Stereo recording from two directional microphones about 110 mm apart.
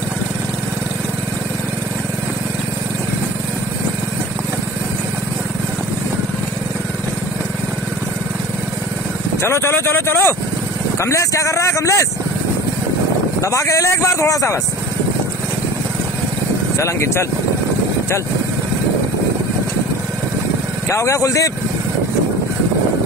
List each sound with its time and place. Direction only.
9.4 s speech: 25° left (ahead or behind)
13.4 s speech: 30° left (ahead or behind)
16.7 s speech: 25° left (ahead or behind)
20.9 s speech: 30° left (ahead or behind)